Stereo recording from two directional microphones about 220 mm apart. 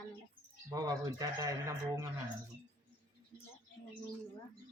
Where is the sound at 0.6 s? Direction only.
15° right (ahead or behind).